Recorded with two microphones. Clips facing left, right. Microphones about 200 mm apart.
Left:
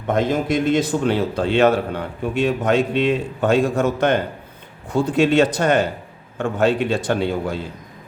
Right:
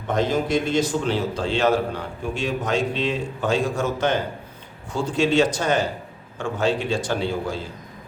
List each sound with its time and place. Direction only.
0.1 s a man's voice: 55° left (ahead or behind)